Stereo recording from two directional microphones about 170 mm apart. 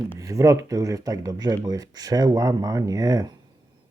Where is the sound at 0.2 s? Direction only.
20° right (ahead or behind).